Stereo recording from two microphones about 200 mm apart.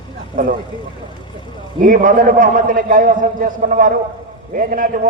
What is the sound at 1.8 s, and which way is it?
A man's voice, 45° right (ahead or behind).